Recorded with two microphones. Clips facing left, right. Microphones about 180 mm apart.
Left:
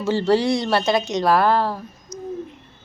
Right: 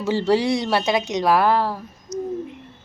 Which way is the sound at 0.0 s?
10° right (ahead or behind).